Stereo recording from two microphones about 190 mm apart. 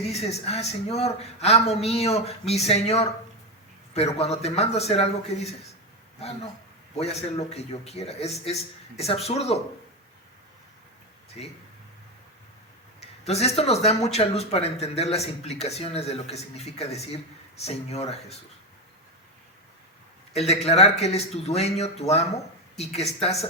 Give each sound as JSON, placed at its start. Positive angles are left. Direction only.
{"t": 0.0, "sound": "speech", "side_deg": 35}
{"t": 6.9, "sound": "speech", "side_deg": 35}
{"t": 13.2, "sound": "speech", "side_deg": 35}
{"t": 20.7, "sound": "speech", "side_deg": 35}